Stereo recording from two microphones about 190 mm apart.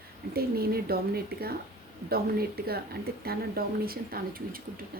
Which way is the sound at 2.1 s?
55° right (ahead or behind).